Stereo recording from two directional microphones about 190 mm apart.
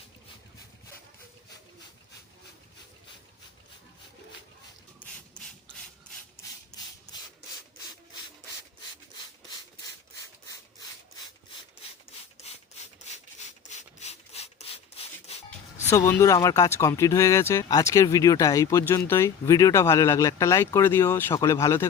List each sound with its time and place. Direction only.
5.0 s a sound: 5° left (ahead or behind)
6.3 s rub: 20° left (ahead or behind)
13.7 s wood: 35° left (ahead or behind)
15.4 s speech: 15° left (ahead or behind)